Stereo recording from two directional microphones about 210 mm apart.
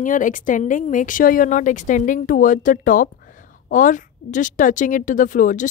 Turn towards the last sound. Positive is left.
turn(degrees=35)  # may be behind; listen again after turning